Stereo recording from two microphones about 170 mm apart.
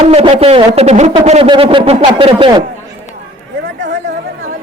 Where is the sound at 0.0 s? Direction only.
35° right (ahead or behind).